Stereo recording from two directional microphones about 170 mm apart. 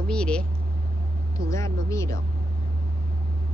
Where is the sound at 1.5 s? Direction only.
20° left (ahead or behind).